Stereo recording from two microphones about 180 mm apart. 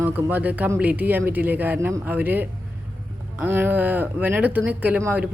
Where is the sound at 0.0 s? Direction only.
10° right (ahead or behind).